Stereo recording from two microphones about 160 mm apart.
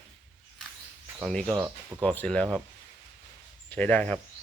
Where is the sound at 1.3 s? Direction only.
5° left (ahead or behind).